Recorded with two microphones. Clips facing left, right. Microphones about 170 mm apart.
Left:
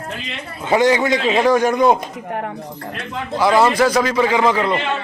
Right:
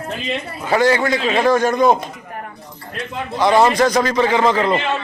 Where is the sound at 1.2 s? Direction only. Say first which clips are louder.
Left 1 dB; 5° left (ahead or behind).